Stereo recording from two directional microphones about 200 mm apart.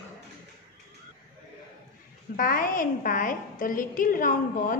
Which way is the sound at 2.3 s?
45° left (ahead or behind).